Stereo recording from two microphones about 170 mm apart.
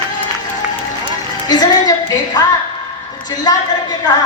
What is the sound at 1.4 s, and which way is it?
Speech, 25° left (ahead or behind).